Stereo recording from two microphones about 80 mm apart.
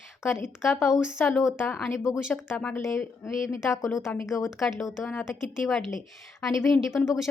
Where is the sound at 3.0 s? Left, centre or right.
Centre.